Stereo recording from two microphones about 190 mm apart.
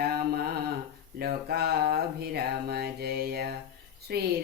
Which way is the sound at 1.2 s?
55° right (ahead or behind).